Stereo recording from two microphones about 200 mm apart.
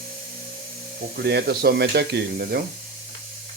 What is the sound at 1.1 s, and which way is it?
Speech, 55° right (ahead or behind).